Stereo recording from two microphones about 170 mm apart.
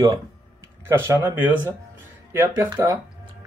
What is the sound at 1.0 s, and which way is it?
Speech, 15° right (ahead or behind).